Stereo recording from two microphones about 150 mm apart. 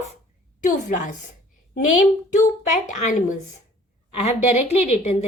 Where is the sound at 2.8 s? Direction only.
55° left (ahead or behind).